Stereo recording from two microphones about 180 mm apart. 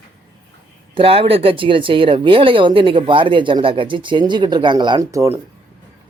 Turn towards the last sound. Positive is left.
turn(degrees=-15)  # may be behind; listen again after turning